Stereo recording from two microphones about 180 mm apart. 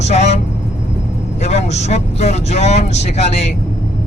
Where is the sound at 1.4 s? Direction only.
40° left (ahead or behind).